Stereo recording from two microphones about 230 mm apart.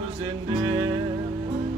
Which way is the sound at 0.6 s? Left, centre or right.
Right.